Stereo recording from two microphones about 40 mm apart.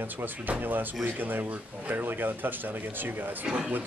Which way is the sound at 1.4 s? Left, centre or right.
Right.